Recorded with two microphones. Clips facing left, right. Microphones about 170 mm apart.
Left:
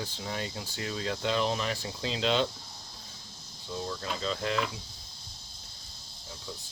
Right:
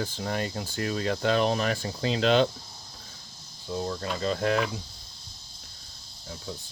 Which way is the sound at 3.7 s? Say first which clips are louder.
Right 4 dB; 45° right (ahead or behind).